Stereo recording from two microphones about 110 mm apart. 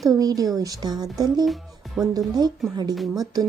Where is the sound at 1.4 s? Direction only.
Centre (ahead or behind).